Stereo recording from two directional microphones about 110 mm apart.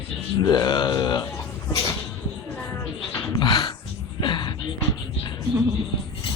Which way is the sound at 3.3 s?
45° left (ahead or behind).